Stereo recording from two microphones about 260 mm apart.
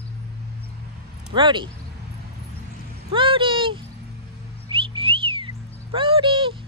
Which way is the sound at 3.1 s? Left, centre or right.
Centre.